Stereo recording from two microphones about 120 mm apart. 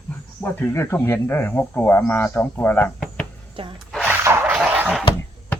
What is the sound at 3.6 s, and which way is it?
Speech, 45° right (ahead or behind).